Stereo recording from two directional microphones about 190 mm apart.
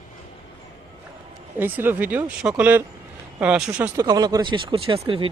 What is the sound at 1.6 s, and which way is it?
Speech, 10° right (ahead or behind).